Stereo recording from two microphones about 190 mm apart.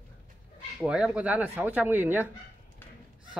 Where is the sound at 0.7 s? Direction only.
5° right (ahead or behind).